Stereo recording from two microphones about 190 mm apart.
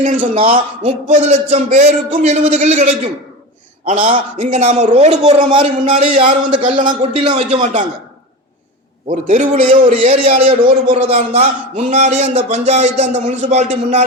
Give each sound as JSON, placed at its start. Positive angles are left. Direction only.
{"t": 0.2, "sound": "a man's voice", "side_deg": -30}
{"t": 7.6, "sound": "a man's voice", "side_deg": -40}
{"t": 9.0, "sound": "a man's voice", "side_deg": -45}
{"t": 10.1, "sound": "a man's voice", "side_deg": -30}